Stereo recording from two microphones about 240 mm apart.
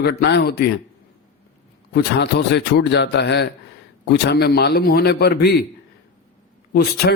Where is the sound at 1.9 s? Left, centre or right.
Left.